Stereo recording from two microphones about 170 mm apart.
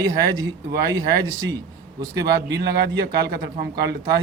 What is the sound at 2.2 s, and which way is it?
Speech, 75° right (ahead or behind).